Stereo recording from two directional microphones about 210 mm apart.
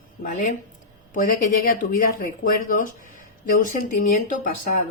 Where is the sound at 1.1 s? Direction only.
40° left (ahead or behind).